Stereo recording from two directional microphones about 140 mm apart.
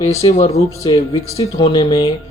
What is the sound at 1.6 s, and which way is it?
Speech, 30° left (ahead or behind).